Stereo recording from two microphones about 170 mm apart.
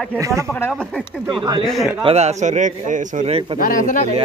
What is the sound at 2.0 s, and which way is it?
A man's voice, 40° right (ahead or behind).